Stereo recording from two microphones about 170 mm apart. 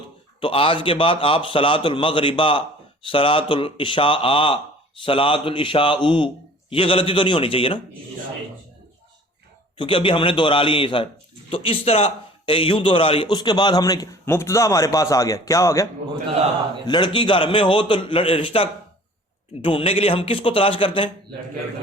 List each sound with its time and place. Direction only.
0.3 s a man's voice: 30° left (ahead or behind)
9.7 s a man's voice: 30° left (ahead or behind)